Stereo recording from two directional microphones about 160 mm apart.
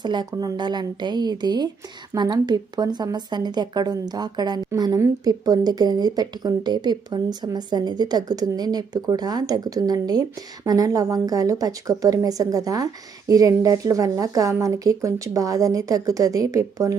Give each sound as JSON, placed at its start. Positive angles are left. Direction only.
{"t": 0.0, "sound": "speech", "side_deg": -25}